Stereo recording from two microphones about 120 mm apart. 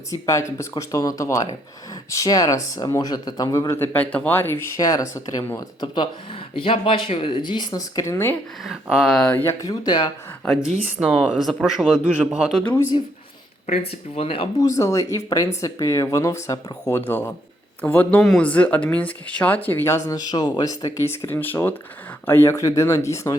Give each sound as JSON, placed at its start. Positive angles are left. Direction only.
{"t": 0.1, "sound": "speech", "side_deg": 25}
{"t": 4.8, "sound": "speech", "side_deg": 30}
{"t": 8.6, "sound": "speech", "side_deg": -5}
{"t": 9.3, "sound": "speech", "side_deg": 20}
{"t": 11.0, "sound": "speech", "side_deg": -5}
{"t": 12.9, "sound": "speech", "side_deg": 45}
{"t": 14.2, "sound": "speech", "side_deg": 50}
{"t": 14.6, "sound": "speech", "side_deg": 25}